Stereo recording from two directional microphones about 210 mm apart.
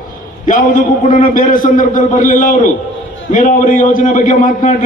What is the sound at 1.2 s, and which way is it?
A man's voice, 40° left (ahead or behind).